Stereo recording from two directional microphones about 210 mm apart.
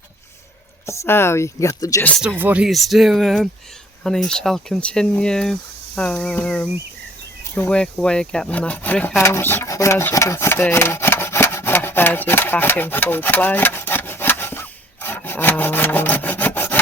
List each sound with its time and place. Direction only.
0.9 s speech: 10° left (ahead or behind)
2.4 s speech: 5° right (ahead or behind)